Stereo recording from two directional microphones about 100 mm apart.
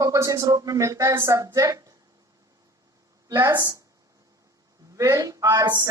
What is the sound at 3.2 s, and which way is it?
Speech, 35° right (ahead or behind).